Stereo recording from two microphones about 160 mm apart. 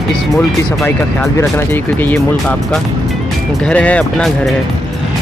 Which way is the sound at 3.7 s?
10° left (ahead or behind).